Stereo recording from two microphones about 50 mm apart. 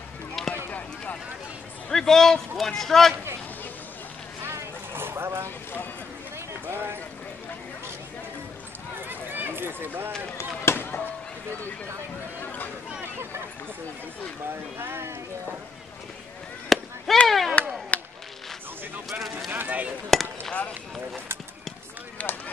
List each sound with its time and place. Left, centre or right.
0.7 s a sound: left
1.9 s a man's voice: centre
4.4 s vehicle: right
6.7 s run: right
8.9 s run: right
10.6 s chop: left
12.4 s a sound: left
14.8 s speech: right
16.6 s fireworks: centre
17.6 s a sound: left
19.0 s speech: centre
19.5 s speech: right
20.1 s chop: centre
22.2 s speech: left